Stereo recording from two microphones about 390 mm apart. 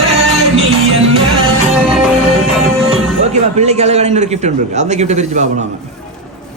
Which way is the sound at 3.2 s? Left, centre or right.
Centre.